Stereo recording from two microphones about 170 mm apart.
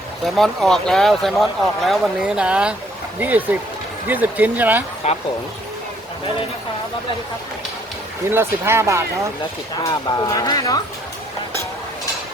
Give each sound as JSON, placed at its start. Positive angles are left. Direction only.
{"t": 0.3, "sound": "speech", "side_deg": 0}
{"t": 5.0, "sound": "speech", "side_deg": 40}
{"t": 8.3, "sound": "speech", "side_deg": -15}
{"t": 9.8, "sound": "speech", "side_deg": 20}